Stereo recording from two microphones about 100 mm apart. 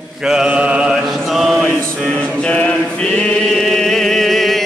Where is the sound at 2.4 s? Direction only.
15° left (ahead or behind).